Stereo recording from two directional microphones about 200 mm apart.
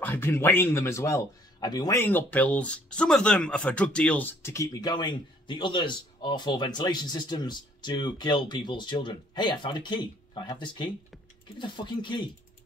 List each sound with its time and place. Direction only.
0.0 s a man's voice: 10° left (ahead or behind)